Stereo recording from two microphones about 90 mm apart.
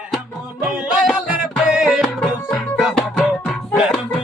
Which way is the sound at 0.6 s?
10° right (ahead or behind).